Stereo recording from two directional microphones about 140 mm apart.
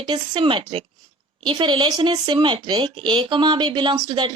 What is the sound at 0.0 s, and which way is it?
A woman's voice, 35° right (ahead or behind).